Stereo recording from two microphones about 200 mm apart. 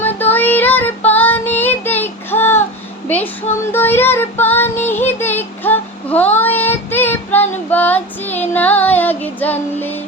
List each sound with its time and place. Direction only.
0.0 s child singing: 10° left (ahead or behind)
3.7 s child singing: 10° left (ahead or behind)